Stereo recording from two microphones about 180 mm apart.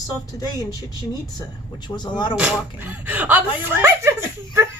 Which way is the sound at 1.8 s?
25° left (ahead or behind).